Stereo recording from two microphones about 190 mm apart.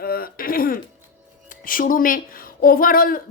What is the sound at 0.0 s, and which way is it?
Throat clearing, 50° left (ahead or behind).